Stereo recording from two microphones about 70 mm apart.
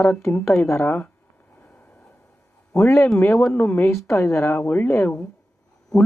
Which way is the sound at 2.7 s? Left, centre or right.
Left.